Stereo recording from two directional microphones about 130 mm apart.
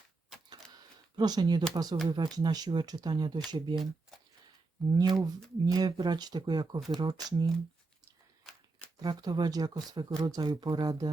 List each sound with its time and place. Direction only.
0.5 s camera: 30° right (ahead or behind)
1.7 s speech: 30° right (ahead or behind)
4.9 s speech: 35° right (ahead or behind)
9.0 s speech: 30° right (ahead or behind)